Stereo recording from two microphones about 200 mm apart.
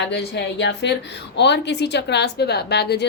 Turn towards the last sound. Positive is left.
turn(degrees=55)  # may be behind; listen again after turning